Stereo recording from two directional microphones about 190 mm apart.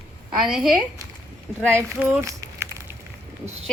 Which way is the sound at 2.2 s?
15° right (ahead or behind).